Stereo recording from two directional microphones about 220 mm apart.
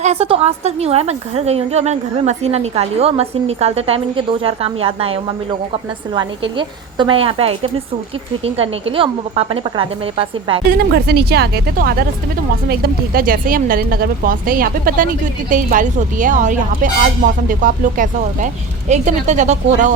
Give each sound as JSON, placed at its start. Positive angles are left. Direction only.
{"t": 0.0, "sound": "a woman's voice", "side_deg": -30}
{"t": 6.6, "sound": "a woman's voice", "side_deg": -20}
{"t": 10.7, "sound": "a woman's voice", "side_deg": -45}